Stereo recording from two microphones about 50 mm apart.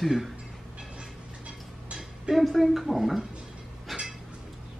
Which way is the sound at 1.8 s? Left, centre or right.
Centre.